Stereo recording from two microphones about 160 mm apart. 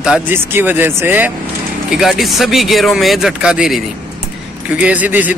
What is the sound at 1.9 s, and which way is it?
Speech, centre (ahead or behind).